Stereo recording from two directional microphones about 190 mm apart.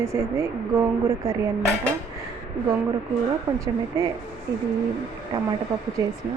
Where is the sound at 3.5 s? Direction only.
20° right (ahead or behind).